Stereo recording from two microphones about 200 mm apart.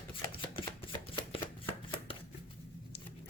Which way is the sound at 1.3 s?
30° left (ahead or behind).